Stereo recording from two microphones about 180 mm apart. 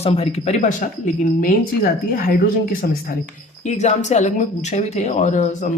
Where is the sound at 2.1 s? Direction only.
55° left (ahead or behind).